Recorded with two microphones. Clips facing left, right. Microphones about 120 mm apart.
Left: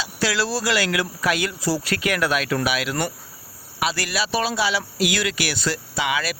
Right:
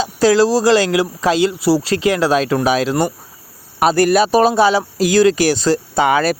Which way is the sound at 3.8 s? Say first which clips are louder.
Right 13 dB; 45° right (ahead or behind).